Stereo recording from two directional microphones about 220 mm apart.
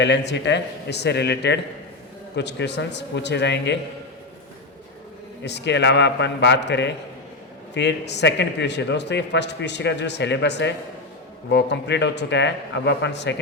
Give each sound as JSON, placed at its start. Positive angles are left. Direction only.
{"t": 0.0, "sound": "a man's voice", "side_deg": 50}
{"t": 5.4, "sound": "a man's voice", "side_deg": 50}